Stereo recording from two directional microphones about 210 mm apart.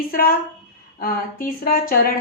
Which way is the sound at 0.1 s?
45° left (ahead or behind).